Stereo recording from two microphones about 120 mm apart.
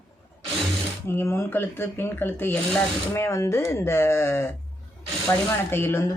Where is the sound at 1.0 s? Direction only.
20° left (ahead or behind).